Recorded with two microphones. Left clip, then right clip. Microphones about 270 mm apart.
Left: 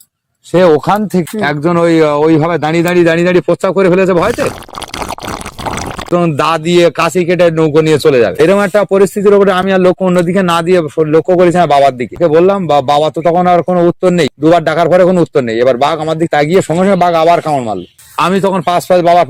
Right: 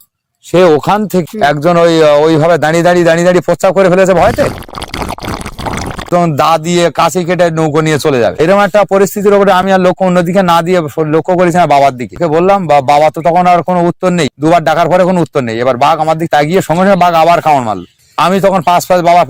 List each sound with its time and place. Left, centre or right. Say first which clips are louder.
0.5 s speech: right 1 dB; right
6.1 s speech: right 3 dB; right